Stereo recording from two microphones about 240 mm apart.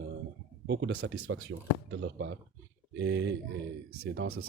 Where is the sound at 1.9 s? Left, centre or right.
Right.